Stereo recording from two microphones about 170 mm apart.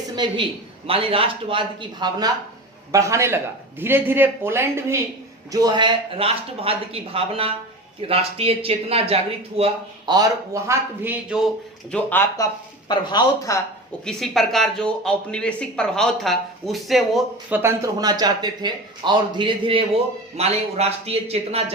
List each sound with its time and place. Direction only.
0.9 s speech: 35° right (ahead or behind)
10.2 s speech: 15° right (ahead or behind)
11.9 s speech: 10° left (ahead or behind)
12.9 s speech: 25° left (ahead or behind)
14.0 s speech: 5° left (ahead or behind)
17.6 s speech: 20° right (ahead or behind); by 21.6 s 35° right (ahead or behind)